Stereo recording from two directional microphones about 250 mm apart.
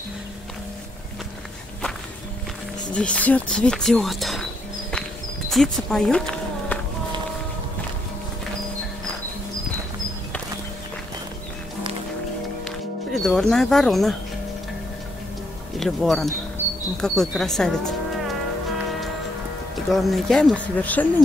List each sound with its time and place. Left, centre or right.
2.9 s speech: centre
5.5 s speech: centre
13.1 s speech: centre
15.8 s speech: centre
19.9 s speech: centre